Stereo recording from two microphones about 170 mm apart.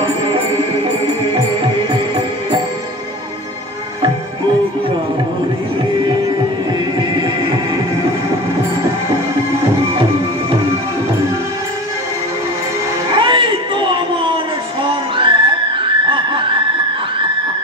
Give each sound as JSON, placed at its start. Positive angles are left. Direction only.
{"t": 0.0, "sound": "music", "side_deg": -30}
{"t": 7.0, "sound": "music", "side_deg": -25}
{"t": 13.1, "sound": "a sound", "side_deg": -30}
{"t": 15.1, "sound": "music", "side_deg": -30}